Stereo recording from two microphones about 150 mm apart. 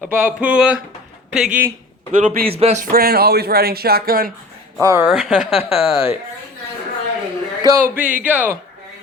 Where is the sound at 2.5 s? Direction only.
40° right (ahead or behind).